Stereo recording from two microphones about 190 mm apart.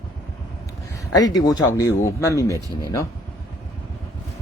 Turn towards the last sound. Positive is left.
turn(degrees=15)  # may be behind; listen again after turning